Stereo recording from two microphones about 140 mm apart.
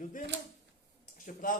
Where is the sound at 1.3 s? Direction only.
75° left (ahead or behind).